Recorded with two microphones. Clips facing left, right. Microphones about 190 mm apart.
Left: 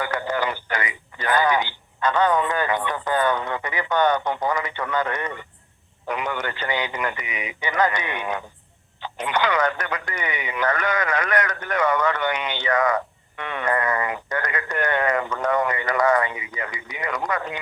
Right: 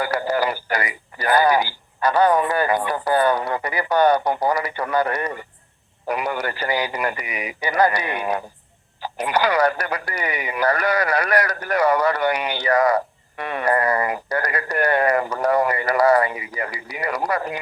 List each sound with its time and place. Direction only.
0.0 s speech: 35° right (ahead or behind)